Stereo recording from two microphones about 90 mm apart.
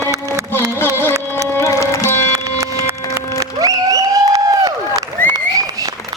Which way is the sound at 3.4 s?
40° right (ahead or behind).